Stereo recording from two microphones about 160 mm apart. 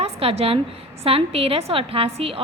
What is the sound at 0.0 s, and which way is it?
A woman's voice, 40° right (ahead or behind).